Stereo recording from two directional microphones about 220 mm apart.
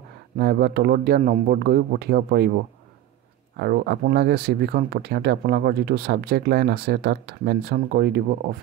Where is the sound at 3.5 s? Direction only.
45° right (ahead or behind).